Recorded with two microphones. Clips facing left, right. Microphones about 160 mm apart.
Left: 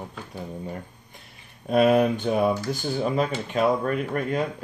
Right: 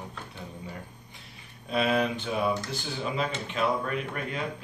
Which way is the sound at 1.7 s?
50° left (ahead or behind).